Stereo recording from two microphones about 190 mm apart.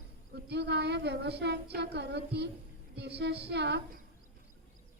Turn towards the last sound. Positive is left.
turn(degrees=-60)  # may be behind; listen again after turning